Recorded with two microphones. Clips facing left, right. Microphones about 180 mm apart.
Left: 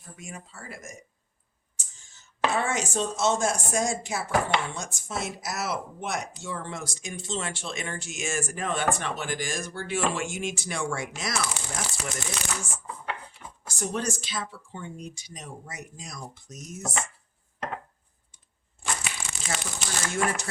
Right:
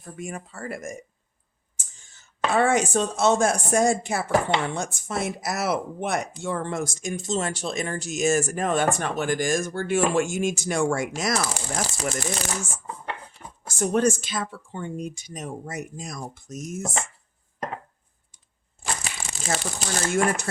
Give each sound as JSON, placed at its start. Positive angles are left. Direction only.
{"t": 0.0, "sound": "speech", "side_deg": -55}
{"t": 2.6, "sound": "speech", "side_deg": -55}
{"t": 13.7, "sound": "speech", "side_deg": -50}
{"t": 19.0, "sound": "crumpling", "side_deg": -35}